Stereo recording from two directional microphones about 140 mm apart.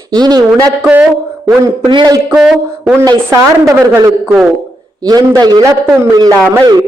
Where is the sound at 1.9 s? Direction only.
30° right (ahead or behind).